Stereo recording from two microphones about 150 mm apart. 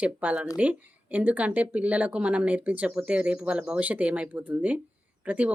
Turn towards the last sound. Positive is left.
turn(degrees=-10)  # may be behind; listen again after turning